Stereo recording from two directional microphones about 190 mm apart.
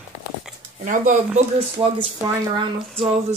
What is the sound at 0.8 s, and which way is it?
Speech, 45° right (ahead or behind).